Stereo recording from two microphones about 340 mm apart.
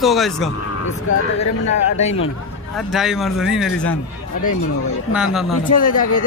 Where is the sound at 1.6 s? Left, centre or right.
Left.